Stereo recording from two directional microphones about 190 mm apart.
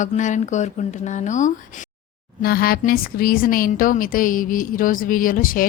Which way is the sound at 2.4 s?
50° left (ahead or behind).